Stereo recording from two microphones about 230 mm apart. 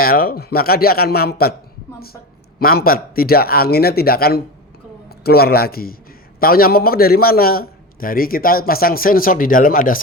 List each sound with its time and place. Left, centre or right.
0.0 s a man's voice: left
2.6 s a man's voice: left